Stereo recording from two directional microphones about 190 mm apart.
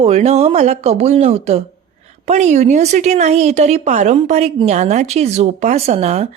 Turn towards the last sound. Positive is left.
turn(degrees=-35)  # may be behind; listen again after turning